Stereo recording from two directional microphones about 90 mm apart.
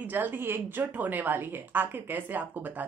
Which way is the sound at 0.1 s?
20° right (ahead or behind).